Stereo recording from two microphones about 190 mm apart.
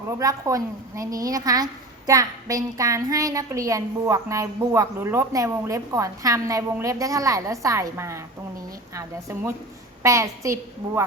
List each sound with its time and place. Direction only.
0.1 s a woman's voice: 15° right (ahead or behind)